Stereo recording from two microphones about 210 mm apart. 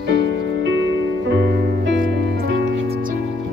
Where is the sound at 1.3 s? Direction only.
55° right (ahead or behind).